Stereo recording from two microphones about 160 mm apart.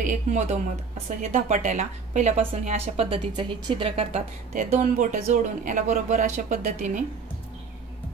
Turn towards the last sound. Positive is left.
turn(degrees=-50)  # may be behind; listen again after turning